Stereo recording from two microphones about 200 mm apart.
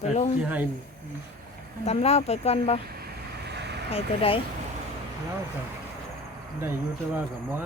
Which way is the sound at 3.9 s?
30° left (ahead or behind).